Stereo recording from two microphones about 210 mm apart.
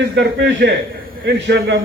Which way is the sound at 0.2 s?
55° right (ahead or behind).